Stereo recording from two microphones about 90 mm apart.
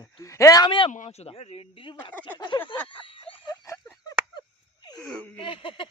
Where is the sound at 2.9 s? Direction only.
75° left (ahead or behind).